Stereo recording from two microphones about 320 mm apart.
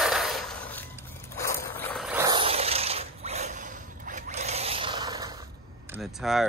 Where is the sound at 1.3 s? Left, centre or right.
Centre.